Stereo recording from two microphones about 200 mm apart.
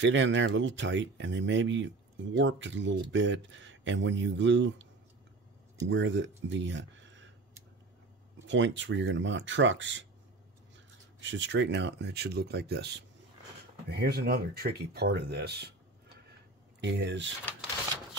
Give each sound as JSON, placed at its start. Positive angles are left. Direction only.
{"t": 0.0, "sound": "speech", "side_deg": -65}
{"t": 5.9, "sound": "speech", "side_deg": -65}
{"t": 8.5, "sound": "speech", "side_deg": -65}
{"t": 11.1, "sound": "speech", "side_deg": -65}
{"t": 16.8, "sound": "speech", "side_deg": -60}